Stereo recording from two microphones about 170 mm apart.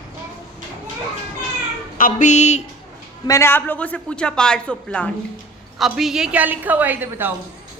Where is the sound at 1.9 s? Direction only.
50° left (ahead or behind).